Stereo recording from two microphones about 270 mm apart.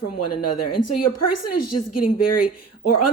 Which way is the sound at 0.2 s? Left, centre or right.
Left.